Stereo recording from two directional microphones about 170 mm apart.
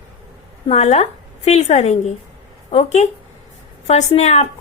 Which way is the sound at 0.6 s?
40° left (ahead or behind).